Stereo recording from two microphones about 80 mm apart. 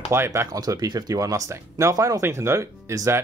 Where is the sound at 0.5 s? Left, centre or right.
Right.